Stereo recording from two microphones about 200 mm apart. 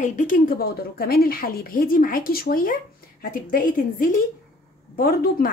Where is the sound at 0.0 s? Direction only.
40° left (ahead or behind).